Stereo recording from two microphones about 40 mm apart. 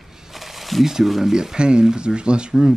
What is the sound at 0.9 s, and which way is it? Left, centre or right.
Speech, centre.